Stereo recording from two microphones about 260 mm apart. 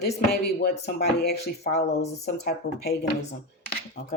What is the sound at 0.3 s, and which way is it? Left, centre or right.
Speech, left.